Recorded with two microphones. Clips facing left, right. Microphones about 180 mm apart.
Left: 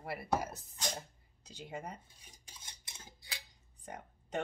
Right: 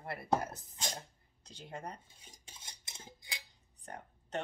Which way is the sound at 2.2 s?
25° right (ahead or behind).